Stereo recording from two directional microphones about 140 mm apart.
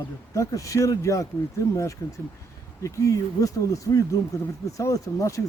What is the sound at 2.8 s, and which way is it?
Speech, 25° left (ahead or behind).